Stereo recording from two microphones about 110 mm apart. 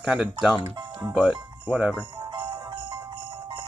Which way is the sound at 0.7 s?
45° right (ahead or behind).